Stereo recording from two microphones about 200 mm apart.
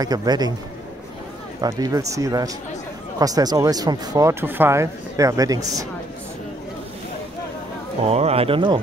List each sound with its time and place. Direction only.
0.0 s speech: 20° right (ahead or behind)
1.6 s speech: 15° right (ahead or behind)
8.1 s speech: 30° right (ahead or behind)